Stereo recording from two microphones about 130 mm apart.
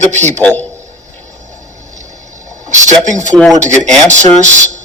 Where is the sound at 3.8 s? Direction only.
5° left (ahead or behind).